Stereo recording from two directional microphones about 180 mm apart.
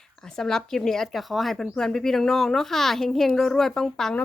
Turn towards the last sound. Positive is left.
turn(degrees=5)  # may be behind; listen again after turning